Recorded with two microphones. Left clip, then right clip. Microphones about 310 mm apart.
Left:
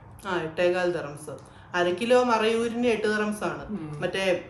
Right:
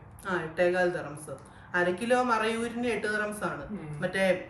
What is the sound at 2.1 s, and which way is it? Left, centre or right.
A woman's voice, centre.